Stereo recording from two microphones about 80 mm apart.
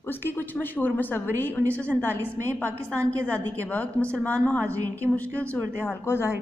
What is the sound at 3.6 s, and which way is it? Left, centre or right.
Speech, left.